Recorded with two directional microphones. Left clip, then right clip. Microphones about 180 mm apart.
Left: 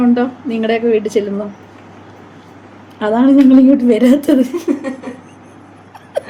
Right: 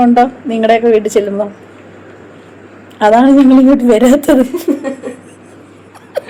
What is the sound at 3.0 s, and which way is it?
A woman's voice, 10° left (ahead or behind).